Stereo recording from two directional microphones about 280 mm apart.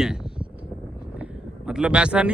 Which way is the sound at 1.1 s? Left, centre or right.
Centre.